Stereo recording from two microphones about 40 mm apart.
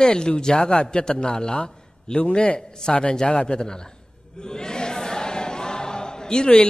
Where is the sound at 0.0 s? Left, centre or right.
Left.